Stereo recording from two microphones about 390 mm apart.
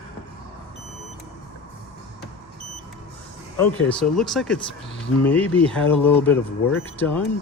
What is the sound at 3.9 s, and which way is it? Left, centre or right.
Speech, centre.